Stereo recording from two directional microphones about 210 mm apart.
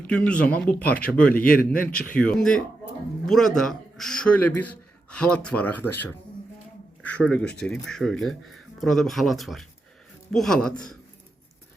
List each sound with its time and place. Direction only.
0.1 s speech: 5° left (ahead or behind)
1.5 s a man's voice: 45° left (ahead or behind)
2.1 s speech: 5° left (ahead or behind)